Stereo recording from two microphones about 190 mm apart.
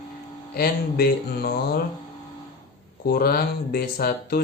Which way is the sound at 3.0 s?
50° left (ahead or behind).